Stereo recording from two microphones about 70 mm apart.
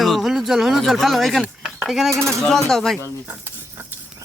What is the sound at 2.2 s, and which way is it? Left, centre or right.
Speech, centre.